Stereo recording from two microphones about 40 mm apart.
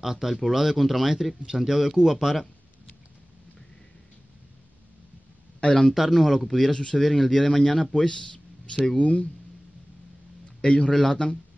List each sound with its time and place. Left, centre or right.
0.0 s speech: centre
5.6 s speech: left
5.9 s speech: centre
6.7 s speech: centre
7.0 s speech: centre
8.9 s speech: left
10.6 s speech: left
10.9 s speech: centre